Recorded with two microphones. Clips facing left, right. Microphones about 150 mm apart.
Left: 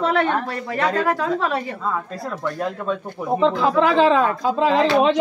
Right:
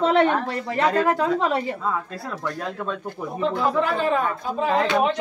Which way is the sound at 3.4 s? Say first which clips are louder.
Left 4 dB; 90° left.